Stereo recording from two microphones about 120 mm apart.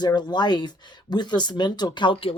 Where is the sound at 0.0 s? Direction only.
35° left (ahead or behind).